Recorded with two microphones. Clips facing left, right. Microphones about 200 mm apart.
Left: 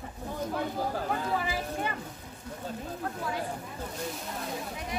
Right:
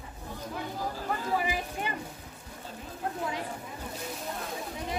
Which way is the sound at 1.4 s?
15° right (ahead or behind).